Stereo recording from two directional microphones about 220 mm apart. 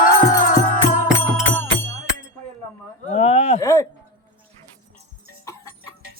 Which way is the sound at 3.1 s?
30° left (ahead or behind).